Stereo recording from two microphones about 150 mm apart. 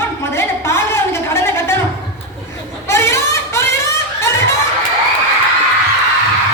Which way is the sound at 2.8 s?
20° left (ahead or behind).